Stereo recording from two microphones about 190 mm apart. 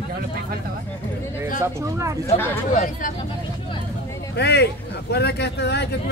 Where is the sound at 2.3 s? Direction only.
10° left (ahead or behind).